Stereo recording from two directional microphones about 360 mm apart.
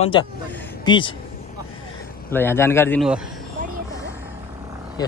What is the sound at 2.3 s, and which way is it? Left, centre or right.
Speech, centre.